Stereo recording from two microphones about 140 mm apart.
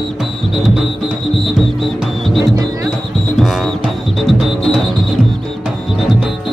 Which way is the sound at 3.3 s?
Centre (ahead or behind).